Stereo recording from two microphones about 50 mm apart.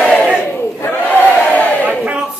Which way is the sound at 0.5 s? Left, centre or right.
Left.